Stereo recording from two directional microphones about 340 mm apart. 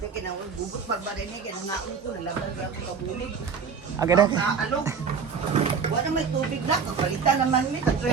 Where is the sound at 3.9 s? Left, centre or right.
Centre.